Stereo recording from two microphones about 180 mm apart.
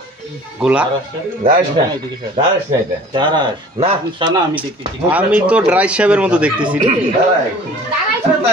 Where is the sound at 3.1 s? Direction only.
25° right (ahead or behind).